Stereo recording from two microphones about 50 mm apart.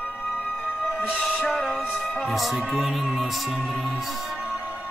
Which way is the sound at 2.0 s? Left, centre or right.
Centre.